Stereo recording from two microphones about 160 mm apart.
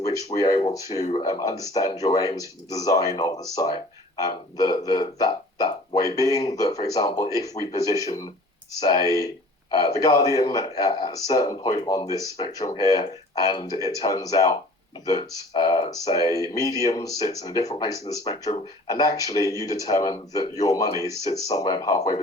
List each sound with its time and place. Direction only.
0.3 s speech: 25° left (ahead or behind)